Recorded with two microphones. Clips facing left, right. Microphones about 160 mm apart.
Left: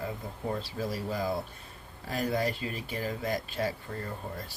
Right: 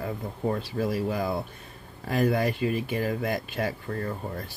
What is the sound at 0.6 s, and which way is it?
Speech, 60° right (ahead or behind).